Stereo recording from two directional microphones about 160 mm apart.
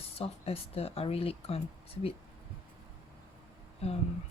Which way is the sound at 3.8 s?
40° left (ahead or behind).